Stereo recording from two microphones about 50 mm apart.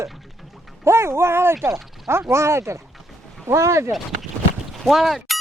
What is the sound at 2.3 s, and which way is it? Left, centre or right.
Speech, right.